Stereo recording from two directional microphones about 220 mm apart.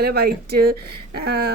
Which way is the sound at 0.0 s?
45° right (ahead or behind).